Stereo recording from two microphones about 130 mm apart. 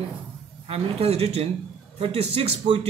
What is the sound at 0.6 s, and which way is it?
Speech, 50° right (ahead or behind).